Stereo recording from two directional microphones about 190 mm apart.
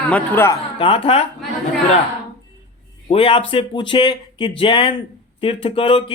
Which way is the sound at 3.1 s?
30° left (ahead or behind).